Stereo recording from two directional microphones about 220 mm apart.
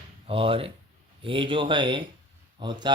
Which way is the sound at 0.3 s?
25° right (ahead or behind).